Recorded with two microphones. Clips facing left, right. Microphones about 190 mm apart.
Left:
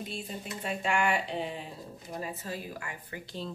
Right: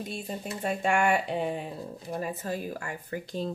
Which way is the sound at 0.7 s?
50° right (ahead or behind).